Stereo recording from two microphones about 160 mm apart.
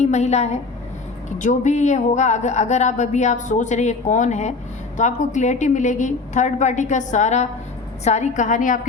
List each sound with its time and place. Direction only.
0.0 s speech: 45° left (ahead or behind)